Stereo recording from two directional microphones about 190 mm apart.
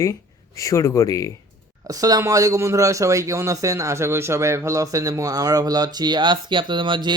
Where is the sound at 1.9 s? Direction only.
20° right (ahead or behind).